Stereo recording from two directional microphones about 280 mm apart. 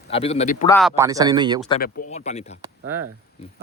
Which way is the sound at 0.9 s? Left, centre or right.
Centre.